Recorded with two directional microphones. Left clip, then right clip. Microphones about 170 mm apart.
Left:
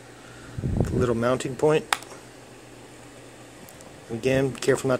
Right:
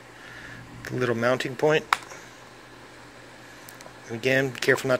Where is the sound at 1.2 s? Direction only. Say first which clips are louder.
Right 1 dB; 30° left (ahead or behind).